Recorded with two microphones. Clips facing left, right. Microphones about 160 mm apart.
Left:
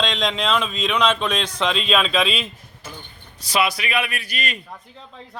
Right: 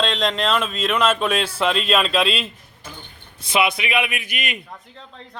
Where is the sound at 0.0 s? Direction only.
Centre (ahead or behind).